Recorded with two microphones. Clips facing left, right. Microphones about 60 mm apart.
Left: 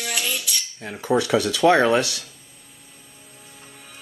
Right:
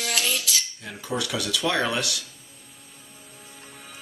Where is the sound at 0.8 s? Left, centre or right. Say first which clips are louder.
Left 8 dB; left.